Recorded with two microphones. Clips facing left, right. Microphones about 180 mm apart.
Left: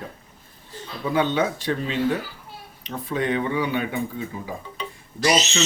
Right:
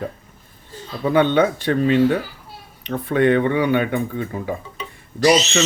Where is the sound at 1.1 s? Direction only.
60° right (ahead or behind).